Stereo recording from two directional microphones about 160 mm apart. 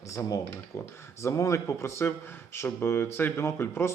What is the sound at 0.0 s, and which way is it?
A man's voice, 20° left (ahead or behind).